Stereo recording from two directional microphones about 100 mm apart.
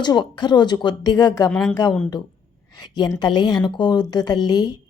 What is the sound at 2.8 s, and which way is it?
A woman's voice, 45° left (ahead or behind).